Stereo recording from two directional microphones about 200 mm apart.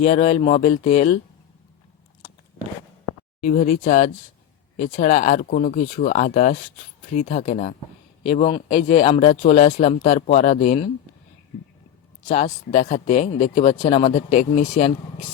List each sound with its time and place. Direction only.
0.0 s speech: 35° left (ahead or behind)
3.4 s speech: 40° left (ahead or behind)
12.3 s speech: 30° left (ahead or behind)